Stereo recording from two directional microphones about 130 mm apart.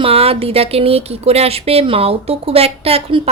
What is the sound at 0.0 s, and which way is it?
Speech, 50° right (ahead or behind).